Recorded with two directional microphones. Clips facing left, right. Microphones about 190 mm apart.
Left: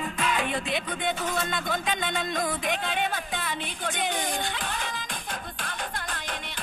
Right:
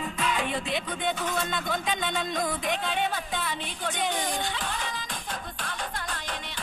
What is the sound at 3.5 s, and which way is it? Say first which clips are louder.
Music: even; 55° left (ahead or behind).